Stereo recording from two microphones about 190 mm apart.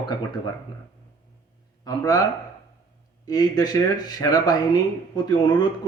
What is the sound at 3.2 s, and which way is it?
Speech, 20° left (ahead or behind).